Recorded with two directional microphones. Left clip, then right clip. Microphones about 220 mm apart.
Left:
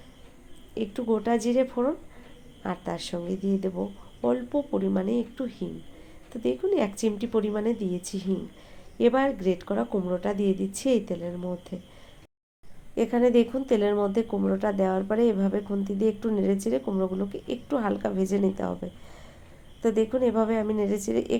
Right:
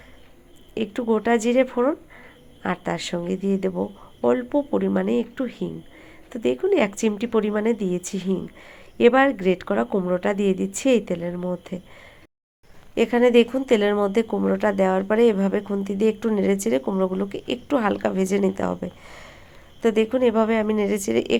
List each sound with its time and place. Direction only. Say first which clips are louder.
0.7 s speech: right 4 dB; 25° right (ahead or behind)
12.9 s speech: right 5 dB; 25° right (ahead or behind)